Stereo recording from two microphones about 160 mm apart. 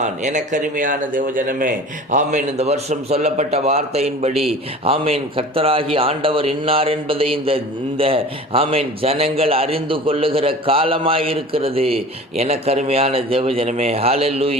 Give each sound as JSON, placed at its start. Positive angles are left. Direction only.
{"t": 0.0, "sound": "speech", "side_deg": -50}